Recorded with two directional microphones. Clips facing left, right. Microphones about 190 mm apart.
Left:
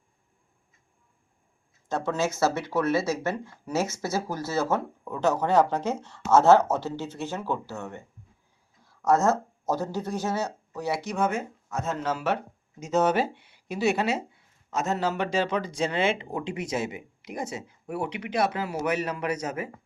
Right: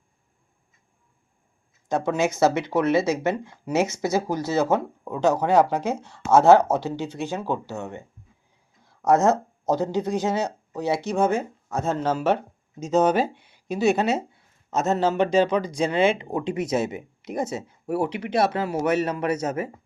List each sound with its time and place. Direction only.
1.9 s speech: 15° right (ahead or behind)
9.0 s speech: 20° right (ahead or behind)
12.8 s speech: 15° right (ahead or behind)
17.8 s speech: 40° right (ahead or behind)
18.5 s speech: 25° right (ahead or behind)